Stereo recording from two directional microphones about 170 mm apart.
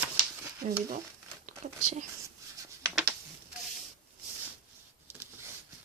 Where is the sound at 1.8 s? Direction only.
45° right (ahead or behind).